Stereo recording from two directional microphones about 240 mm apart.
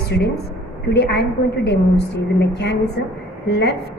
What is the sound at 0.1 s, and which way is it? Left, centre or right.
A woman's voice, left.